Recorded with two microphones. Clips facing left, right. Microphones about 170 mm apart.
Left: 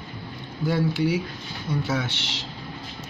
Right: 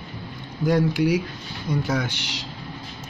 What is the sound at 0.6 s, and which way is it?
Speech, 15° right (ahead or behind).